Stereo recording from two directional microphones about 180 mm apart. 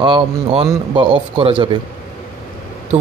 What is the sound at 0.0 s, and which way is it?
A man's voice, 30° right (ahead or behind).